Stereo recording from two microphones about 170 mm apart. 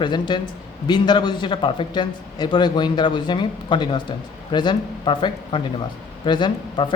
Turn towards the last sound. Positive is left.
turn(degrees=30)  # may be behind; listen again after turning